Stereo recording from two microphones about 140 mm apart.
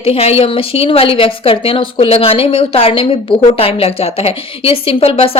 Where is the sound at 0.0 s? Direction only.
45° left (ahead or behind).